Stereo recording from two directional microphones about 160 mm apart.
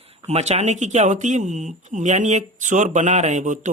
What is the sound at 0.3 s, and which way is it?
Speech, 45° right (ahead or behind).